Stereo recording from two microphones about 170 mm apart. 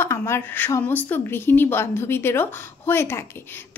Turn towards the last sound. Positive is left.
turn(degrees=15)  # may be behind; listen again after turning